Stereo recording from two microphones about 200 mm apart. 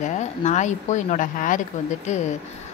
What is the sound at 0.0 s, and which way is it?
Speech, 35° left (ahead or behind).